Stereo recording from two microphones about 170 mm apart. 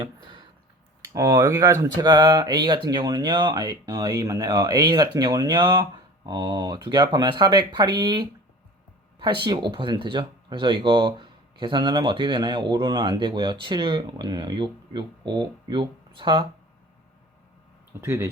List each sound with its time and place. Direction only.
1.0 s speech: 20° right (ahead or behind)
18.0 s speech: 15° right (ahead or behind)